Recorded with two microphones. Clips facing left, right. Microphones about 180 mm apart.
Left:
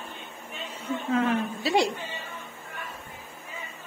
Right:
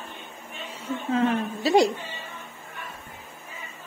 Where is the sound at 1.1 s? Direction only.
40° right (ahead or behind).